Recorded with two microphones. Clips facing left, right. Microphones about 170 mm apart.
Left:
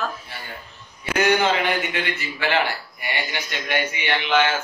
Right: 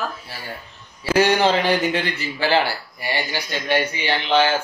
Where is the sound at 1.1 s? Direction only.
30° right (ahead or behind).